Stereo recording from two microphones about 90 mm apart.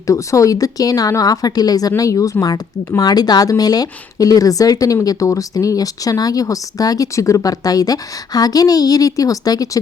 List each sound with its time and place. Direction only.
0.1 s speech: 35° left (ahead or behind)